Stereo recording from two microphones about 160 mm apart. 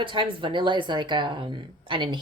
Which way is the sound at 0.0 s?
30° right (ahead or behind).